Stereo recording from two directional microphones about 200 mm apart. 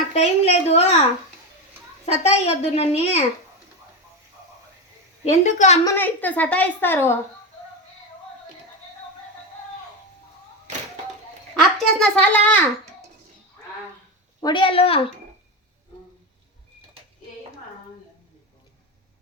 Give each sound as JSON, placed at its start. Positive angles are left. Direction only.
{"t": 0.1, "sound": "a sound", "side_deg": 30}
{"t": 2.2, "sound": "a woman's voice", "side_deg": 30}
{"t": 5.2, "sound": "a woman's voice", "side_deg": 35}
{"t": 5.8, "sound": "a woman's voice", "side_deg": 10}
{"t": 11.5, "sound": "a child's voice", "side_deg": 5}
{"t": 14.4, "sound": "speech", "side_deg": 25}